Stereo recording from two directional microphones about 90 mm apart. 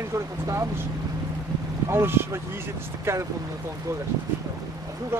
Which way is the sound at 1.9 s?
25° right (ahead or behind).